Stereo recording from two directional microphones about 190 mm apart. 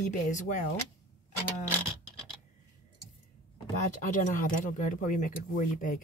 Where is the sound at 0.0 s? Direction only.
40° left (ahead or behind).